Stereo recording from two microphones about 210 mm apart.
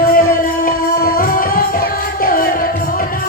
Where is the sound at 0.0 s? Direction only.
40° left (ahead or behind).